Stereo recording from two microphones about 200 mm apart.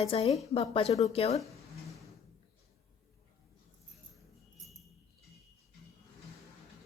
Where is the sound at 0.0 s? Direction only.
30° left (ahead or behind).